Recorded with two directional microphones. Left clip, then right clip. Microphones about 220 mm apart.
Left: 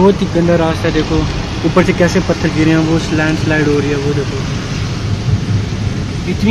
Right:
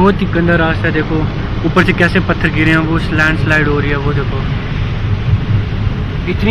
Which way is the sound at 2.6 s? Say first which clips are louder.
Left 1 dB; 20° left (ahead or behind).